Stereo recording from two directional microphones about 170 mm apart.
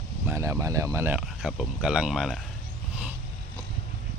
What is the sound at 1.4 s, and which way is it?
Speech, centre (ahead or behind).